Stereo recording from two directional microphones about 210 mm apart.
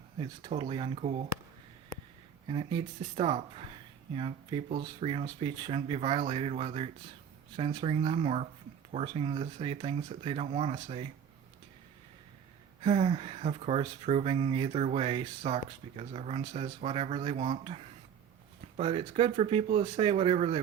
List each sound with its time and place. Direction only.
0.2 s speech: 25° right (ahead or behind)
2.5 s speech: 25° right (ahead or behind)
12.8 s speech: 25° right (ahead or behind)
18.8 s speech: 25° right (ahead or behind)